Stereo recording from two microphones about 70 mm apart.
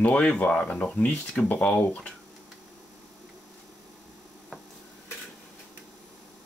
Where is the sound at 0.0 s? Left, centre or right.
Centre.